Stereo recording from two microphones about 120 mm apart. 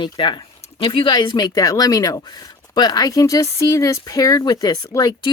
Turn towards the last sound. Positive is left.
turn(degrees=30)  # may be behind; listen again after turning